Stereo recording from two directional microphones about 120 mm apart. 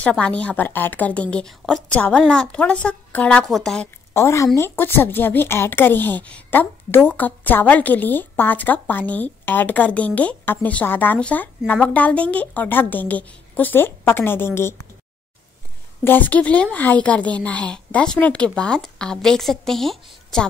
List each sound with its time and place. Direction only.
0.0 s speech: 10° left (ahead or behind)
4.1 s a woman's voice: 25° left (ahead or behind)
16.0 s speech: 15° left (ahead or behind)